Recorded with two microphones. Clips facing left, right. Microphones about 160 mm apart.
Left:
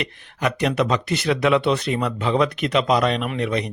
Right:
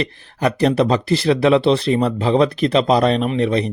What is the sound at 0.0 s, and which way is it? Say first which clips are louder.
Speech: right 5 dB; 35° right (ahead or behind).